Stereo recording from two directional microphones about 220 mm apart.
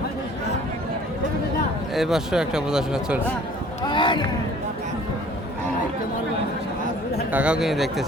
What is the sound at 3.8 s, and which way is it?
Speech, 20° left (ahead or behind).